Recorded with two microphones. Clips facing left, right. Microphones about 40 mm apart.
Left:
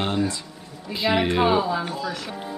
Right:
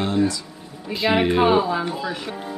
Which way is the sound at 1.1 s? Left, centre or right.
Centre.